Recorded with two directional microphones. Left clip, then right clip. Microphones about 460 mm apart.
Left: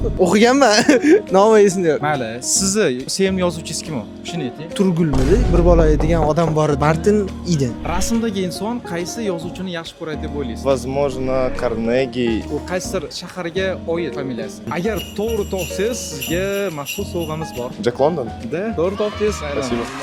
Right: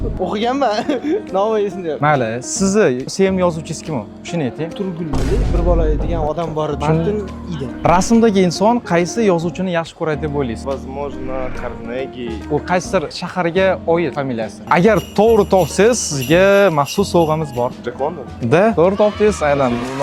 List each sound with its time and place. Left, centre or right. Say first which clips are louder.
0.2 s speech: left 5 dB; left
2.0 s speech: right 5 dB; centre
4.8 s speech: left 9 dB; left
5.1 s speech: left 3 dB; centre
5.6 s speech: left 3 dB; left
7.9 s speech: right 13 dB; centre
10.7 s speech: left 5 dB; left
12.7 s speech: right 6 dB; centre
18.5 s speech: right 9 dB; right
18.9 s speech: right 6 dB; centre